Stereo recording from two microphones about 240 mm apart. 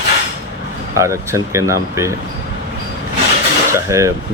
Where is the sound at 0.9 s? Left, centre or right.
Centre.